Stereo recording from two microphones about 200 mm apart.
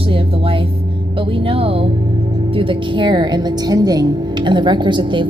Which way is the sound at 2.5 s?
25° right (ahead or behind).